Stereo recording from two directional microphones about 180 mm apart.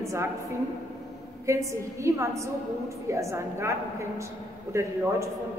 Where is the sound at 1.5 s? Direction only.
15° right (ahead or behind).